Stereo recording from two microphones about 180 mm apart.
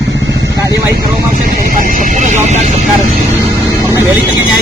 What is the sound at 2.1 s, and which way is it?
Speech, 40° right (ahead or behind).